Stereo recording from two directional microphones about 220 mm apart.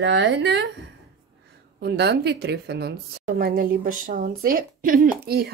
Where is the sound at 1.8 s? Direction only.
50° right (ahead or behind).